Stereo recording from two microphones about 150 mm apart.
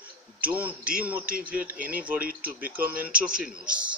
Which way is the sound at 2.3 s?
75° right (ahead or behind).